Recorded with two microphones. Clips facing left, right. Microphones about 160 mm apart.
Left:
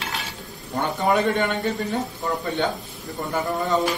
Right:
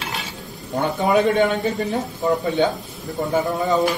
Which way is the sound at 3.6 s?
Centre (ahead or behind).